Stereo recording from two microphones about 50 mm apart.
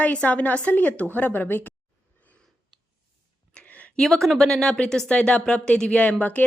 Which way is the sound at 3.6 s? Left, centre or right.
Left.